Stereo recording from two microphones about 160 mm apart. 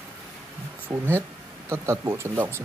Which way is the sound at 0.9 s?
15° right (ahead or behind).